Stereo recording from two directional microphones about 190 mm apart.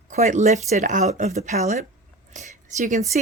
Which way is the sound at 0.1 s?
40° right (ahead or behind).